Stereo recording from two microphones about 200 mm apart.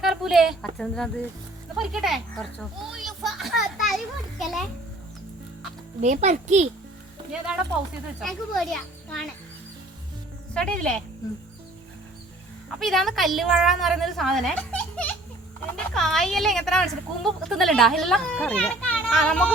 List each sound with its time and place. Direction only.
0.0 s a woman's voice: centre (ahead or behind)
1.7 s a sound: centre (ahead or behind)
6.0 s a child's voice: 35° right (ahead or behind)
7.3 s a woman's voice: 5° right (ahead or behind)
10.5 s a woman's voice: 5° left (ahead or behind)
12.8 s a woman's voice: centre (ahead or behind)